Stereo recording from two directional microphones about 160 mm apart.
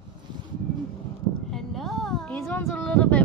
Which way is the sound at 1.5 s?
Centre (ahead or behind).